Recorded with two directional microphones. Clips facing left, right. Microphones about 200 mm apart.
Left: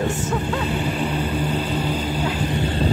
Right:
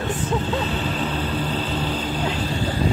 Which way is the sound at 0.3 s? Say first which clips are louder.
Even; 10° left (ahead or behind).